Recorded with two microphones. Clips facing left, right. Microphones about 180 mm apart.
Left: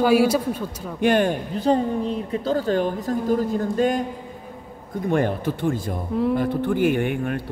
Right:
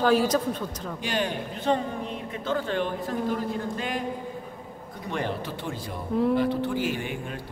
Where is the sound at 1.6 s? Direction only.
35° left (ahead or behind).